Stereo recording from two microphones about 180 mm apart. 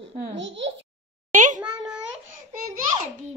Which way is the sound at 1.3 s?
45° right (ahead or behind).